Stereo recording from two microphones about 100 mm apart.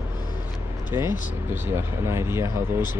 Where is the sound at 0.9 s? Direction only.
25° right (ahead or behind).